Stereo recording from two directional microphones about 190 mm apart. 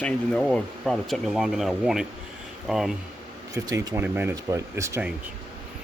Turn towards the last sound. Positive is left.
turn(degrees=-15)  # may be behind; listen again after turning